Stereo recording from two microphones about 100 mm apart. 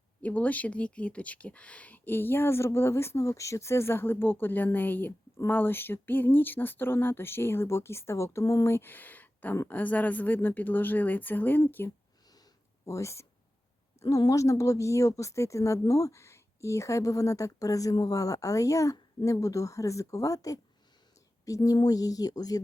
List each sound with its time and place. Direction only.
0.2 s a woman's voice: 15° left (ahead or behind); by 22.6 s 40° left (ahead or behind)